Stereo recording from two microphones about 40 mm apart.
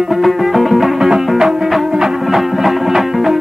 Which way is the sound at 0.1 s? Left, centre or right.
Centre.